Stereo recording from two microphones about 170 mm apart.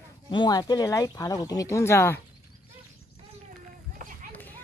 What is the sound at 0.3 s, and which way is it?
Speech, 25° left (ahead or behind).